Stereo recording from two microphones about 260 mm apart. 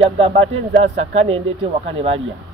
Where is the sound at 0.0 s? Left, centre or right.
Right.